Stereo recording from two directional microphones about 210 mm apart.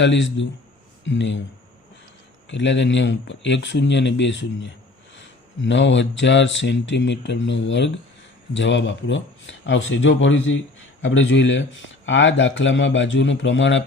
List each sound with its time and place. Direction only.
0.0 s speech: 60° left (ahead or behind)
2.5 s speech: 60° left (ahead or behind)